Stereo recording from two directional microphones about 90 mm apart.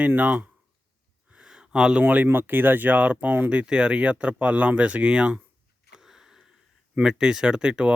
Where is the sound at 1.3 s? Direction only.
10° right (ahead or behind).